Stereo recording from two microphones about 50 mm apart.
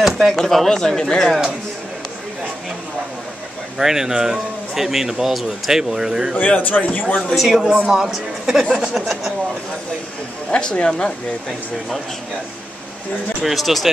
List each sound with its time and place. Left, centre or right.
0.0 s speech: centre
3.7 s speech: centre
6.3 s a man's voice: left
7.3 s speech: centre
7.6 s speech: right
7.9 s speech: centre
9.0 s speech: centre
10.5 s speech: left
13.4 s speech: centre